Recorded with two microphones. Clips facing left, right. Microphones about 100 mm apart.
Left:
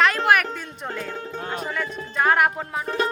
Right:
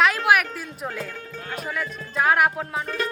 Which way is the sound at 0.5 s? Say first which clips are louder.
Even; 5° right (ahead or behind).